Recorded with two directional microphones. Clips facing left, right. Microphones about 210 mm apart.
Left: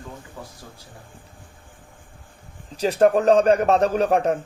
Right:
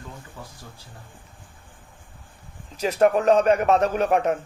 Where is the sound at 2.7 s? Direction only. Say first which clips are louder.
Left 2 dB; 35° left (ahead or behind).